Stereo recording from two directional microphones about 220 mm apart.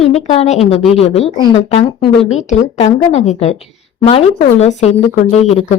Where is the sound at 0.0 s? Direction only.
30° left (ahead or behind).